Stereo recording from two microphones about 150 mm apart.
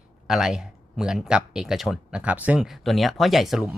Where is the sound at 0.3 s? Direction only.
5° right (ahead or behind).